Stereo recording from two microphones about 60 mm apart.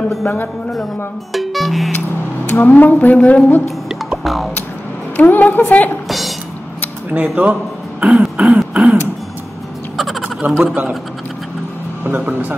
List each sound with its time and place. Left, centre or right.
1.3 s speech: centre
2.5 s a woman's voice: left
3.9 s music: centre
5.1 s a woman's voice: left
6.0 s a sound: centre
7.1 s speech: right
8.0 s throat clearing: centre
9.9 s bleat: centre
10.6 s speech: right
12.0 s speech: right